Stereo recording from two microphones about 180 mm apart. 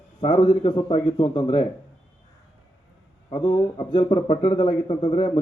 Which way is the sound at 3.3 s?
25° left (ahead or behind).